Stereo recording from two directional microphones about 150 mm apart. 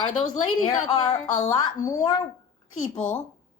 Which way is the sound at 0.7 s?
30° left (ahead or behind).